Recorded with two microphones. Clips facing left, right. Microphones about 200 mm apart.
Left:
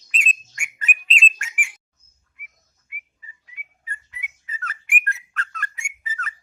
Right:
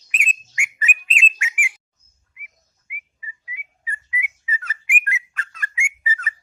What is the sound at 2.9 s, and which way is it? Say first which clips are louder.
Whistling: right 5 dB; 5° right (ahead or behind).